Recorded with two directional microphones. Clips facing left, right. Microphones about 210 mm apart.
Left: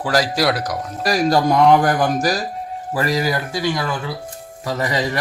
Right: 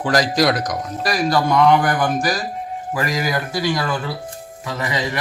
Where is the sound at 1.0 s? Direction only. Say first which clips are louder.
Left 3 dB; 40° left (ahead or behind).